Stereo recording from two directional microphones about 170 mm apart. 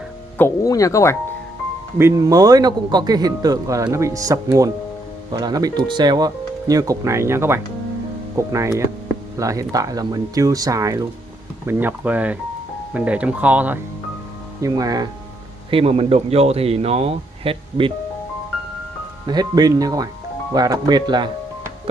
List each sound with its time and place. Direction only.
0.4 s speech: 20° left (ahead or behind)
2.0 s speech: 15° right (ahead or behind)
14.6 s speech: 20° right (ahead or behind)
15.7 s speech: 35° right (ahead or behind)
19.2 s speech: 25° right (ahead or behind)